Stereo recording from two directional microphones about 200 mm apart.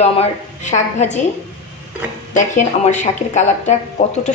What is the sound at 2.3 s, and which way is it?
A woman's voice, 35° left (ahead or behind).